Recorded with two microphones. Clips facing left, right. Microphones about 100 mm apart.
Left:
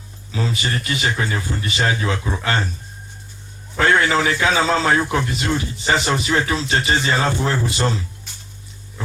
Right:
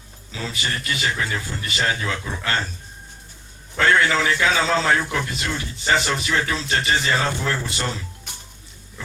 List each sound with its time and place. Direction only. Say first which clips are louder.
0.4 s speech: left 3 dB; 25° left (ahead or behind)
3.8 s speech: left 2 dB; 20° left (ahead or behind)